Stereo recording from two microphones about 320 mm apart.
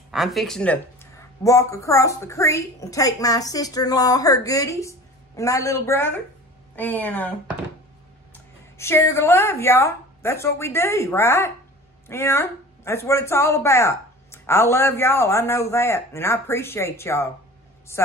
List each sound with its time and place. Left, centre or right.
0.1 s speech: centre
8.7 s speech: centre